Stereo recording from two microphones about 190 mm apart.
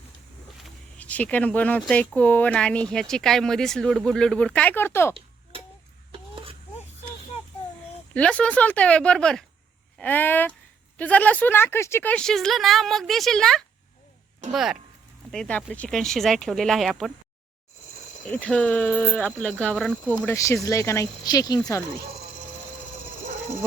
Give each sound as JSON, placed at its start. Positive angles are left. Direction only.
{"t": 0.6, "sound": "speech", "side_deg": 5}
{"t": 6.1, "sound": "whispering", "side_deg": -30}
{"t": 8.1, "sound": "speech", "side_deg": 5}
{"t": 18.3, "sound": "speech", "side_deg": 5}
{"t": 20.2, "sound": "speech", "side_deg": 15}